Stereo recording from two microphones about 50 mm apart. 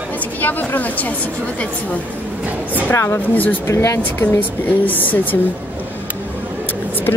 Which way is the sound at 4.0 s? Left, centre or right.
Left.